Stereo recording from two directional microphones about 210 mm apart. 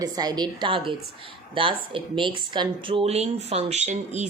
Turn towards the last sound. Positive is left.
turn(degrees=-35)  # may be behind; listen again after turning